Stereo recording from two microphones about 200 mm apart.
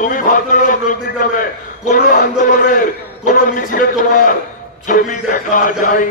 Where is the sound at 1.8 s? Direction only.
45° left (ahead or behind).